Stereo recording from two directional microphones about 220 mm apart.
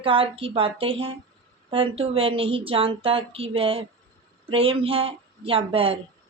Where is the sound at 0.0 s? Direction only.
25° right (ahead or behind).